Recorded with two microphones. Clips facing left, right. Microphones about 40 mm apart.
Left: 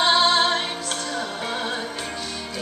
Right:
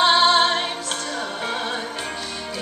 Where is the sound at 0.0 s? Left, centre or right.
Centre.